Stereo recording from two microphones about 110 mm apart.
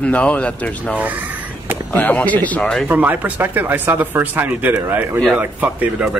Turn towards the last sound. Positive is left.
turn(degrees=-15)  # may be behind; listen again after turning